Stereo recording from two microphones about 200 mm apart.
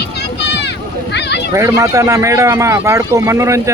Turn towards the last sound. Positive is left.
turn(degrees=-15)  # may be behind; listen again after turning